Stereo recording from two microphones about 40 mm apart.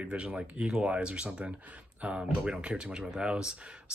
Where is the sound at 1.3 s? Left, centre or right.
Right.